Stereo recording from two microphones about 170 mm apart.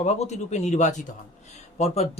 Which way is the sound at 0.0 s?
40° left (ahead or behind).